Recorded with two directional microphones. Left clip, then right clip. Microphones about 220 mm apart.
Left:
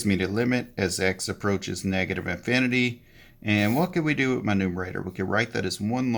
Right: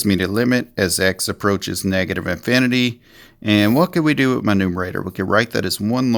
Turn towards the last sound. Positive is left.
turn(degrees=-45)  # may be behind; listen again after turning